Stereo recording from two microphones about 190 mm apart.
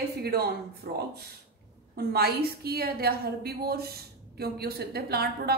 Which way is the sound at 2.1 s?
55° right (ahead or behind).